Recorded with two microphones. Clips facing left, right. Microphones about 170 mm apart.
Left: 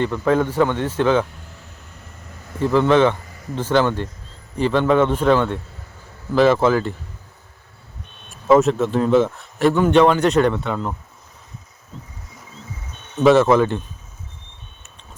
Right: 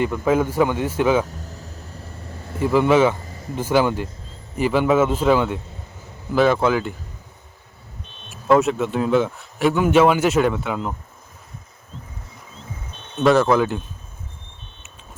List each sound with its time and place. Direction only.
0.0 s a man's voice: 10° right (ahead or behind)
1.2 s a sound: 40° right (ahead or behind)
2.6 s a man's voice: 10° right (ahead or behind)
3.2 s a sound: 30° right (ahead or behind)
3.5 s a man's voice: 10° right (ahead or behind)
8.4 s speech: centre (ahead or behind)
13.1 s speech: centre (ahead or behind)